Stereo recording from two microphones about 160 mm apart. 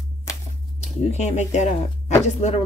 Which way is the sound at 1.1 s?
45° left (ahead or behind).